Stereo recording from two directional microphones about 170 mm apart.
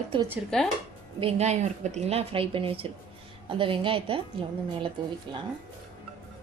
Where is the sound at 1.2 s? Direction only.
40° right (ahead or behind).